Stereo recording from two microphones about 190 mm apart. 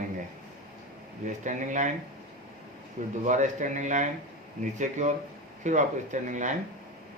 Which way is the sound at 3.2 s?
40° right (ahead or behind).